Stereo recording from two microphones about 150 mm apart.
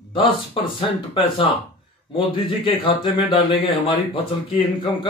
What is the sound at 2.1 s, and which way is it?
Speech, 35° left (ahead or behind).